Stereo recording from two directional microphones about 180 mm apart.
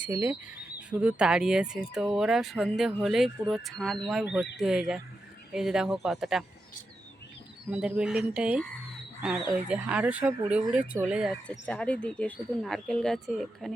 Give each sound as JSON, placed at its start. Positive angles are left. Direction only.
{"t": 0.0, "sound": "speech", "side_deg": -10}
{"t": 7.7, "sound": "speech", "side_deg": -5}
{"t": 11.3, "sound": "speech", "side_deg": 5}